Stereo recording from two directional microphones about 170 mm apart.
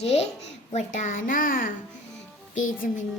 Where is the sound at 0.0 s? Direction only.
35° left (ahead or behind); by 1.7 s 55° left (ahead or behind).